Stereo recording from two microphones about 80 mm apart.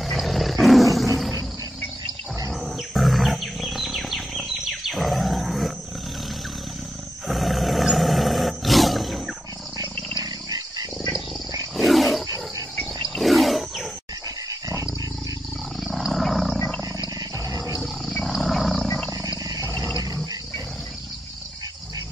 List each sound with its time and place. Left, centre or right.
0.0 s roar: centre
2.6 s wild animals: centre
7.2 s roar: centre
9.8 s a sound: right
11.7 s wild animals: centre
15.9 s roaring cats: centre
18.2 s roaring cats: centre